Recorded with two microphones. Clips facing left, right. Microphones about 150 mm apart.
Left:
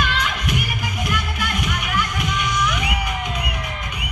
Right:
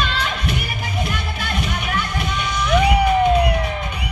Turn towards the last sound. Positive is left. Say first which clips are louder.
# right 8 dB
turn(degrees=-30)  # may be behind; listen again after turning